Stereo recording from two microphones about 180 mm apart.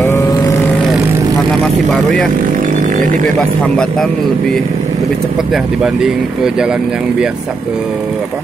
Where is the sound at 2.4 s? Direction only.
50° right (ahead or behind).